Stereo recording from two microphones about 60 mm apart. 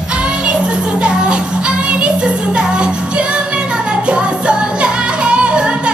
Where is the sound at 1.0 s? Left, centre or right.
Centre.